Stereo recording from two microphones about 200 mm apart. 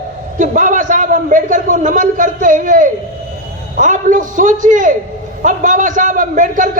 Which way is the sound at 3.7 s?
40° right (ahead or behind).